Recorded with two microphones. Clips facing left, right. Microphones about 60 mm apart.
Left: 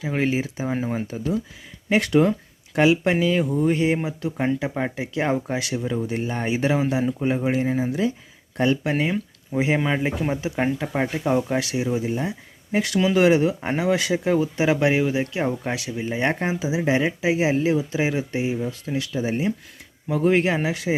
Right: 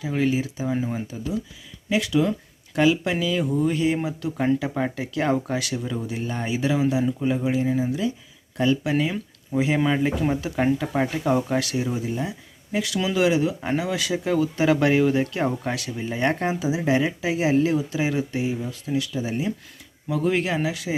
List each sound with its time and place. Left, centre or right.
0.0 s speech: left
6.3 s speech: left; by 12.0 s centre
12.0 s speech: left